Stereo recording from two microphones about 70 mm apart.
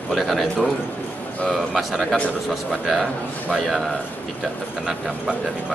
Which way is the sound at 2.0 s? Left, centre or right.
Centre.